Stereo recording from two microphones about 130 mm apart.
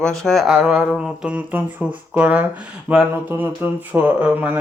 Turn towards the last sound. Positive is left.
turn(degrees=-10)  # may be behind; listen again after turning